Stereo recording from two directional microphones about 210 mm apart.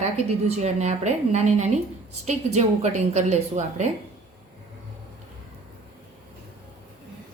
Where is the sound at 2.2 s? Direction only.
35° right (ahead or behind).